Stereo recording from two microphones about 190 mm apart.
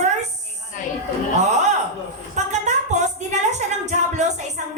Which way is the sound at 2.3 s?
40° right (ahead or behind).